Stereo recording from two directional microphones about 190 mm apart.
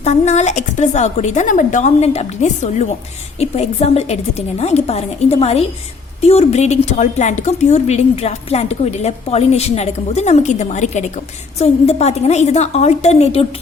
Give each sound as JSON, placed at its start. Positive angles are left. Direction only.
{"t": 0.0, "sound": "a woman's voice", "side_deg": 35}